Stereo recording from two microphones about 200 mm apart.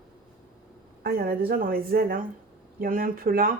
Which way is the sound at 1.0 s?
50° right (ahead or behind).